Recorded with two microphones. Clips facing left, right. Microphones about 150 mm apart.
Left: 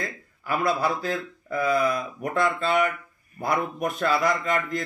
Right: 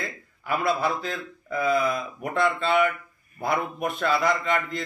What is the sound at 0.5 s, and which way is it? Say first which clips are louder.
Speech: even; 40° left (ahead or behind).